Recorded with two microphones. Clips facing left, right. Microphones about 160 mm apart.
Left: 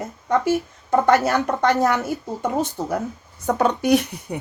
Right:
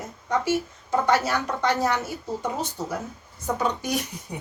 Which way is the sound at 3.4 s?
70° left (ahead or behind).